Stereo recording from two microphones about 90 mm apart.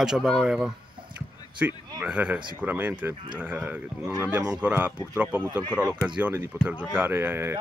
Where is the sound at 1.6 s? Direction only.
20° right (ahead or behind).